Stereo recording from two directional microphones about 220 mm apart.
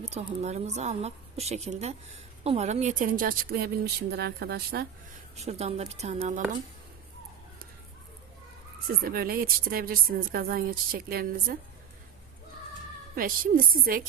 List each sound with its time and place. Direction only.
0.0 s a woman's voice: 30° right (ahead or behind)
5.4 s a woman's voice: 30° right (ahead or behind)
9.0 s a woman's voice: 40° right (ahead or behind)
13.1 s speech: 40° right (ahead or behind)